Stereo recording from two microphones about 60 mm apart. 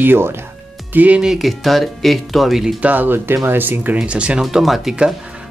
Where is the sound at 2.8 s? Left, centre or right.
Right.